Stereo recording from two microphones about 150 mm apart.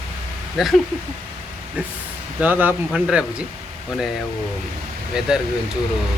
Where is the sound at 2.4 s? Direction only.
10° right (ahead or behind).